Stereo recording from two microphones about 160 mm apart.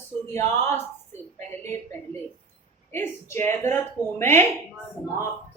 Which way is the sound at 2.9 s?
15° left (ahead or behind).